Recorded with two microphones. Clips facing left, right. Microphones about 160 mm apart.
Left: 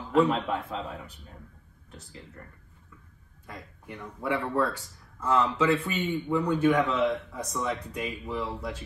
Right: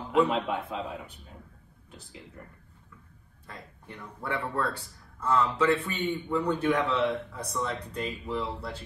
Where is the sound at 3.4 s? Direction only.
10° left (ahead or behind).